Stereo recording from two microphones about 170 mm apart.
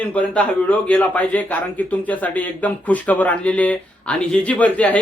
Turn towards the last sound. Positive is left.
turn(degrees=10)  # may be behind; listen again after turning